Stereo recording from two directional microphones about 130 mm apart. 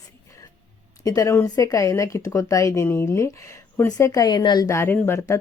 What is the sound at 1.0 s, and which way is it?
Speech, 25° left (ahead or behind).